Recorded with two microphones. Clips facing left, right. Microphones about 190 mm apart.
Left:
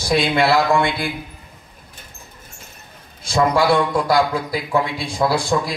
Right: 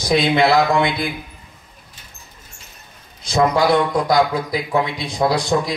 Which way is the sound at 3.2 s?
20° right (ahead or behind).